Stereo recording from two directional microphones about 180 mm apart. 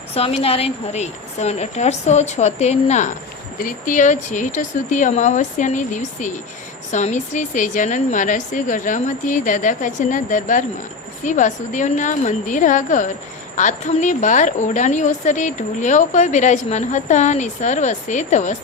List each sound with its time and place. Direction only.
0.1 s a woman's voice: 35° left (ahead or behind)